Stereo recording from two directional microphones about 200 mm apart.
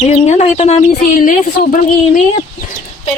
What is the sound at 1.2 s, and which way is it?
Speech, 45° left (ahead or behind).